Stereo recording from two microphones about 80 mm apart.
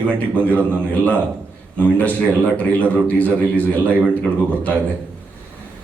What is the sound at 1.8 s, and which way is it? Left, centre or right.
A man's voice, centre.